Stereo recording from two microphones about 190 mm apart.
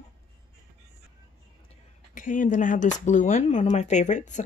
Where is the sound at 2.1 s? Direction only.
45° left (ahead or behind).